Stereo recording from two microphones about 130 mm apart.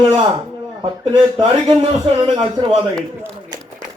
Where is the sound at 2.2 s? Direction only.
40° right (ahead or behind).